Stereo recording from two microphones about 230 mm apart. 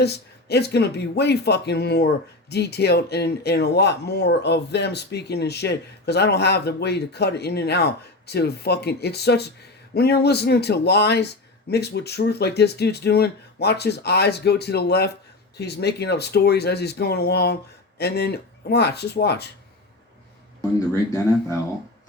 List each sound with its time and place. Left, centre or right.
0.0 s speech: left
20.9 s a man's voice: centre